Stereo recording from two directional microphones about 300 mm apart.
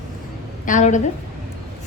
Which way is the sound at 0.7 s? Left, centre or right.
Left.